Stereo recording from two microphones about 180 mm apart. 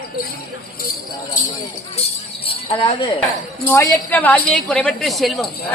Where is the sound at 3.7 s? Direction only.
10° left (ahead or behind).